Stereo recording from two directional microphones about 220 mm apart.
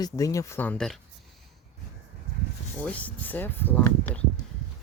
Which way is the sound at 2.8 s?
5° left (ahead or behind).